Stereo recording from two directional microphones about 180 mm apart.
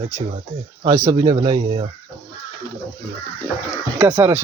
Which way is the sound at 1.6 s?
35° right (ahead or behind).